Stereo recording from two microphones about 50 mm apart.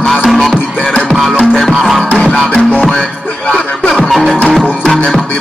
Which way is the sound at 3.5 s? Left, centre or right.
Centre.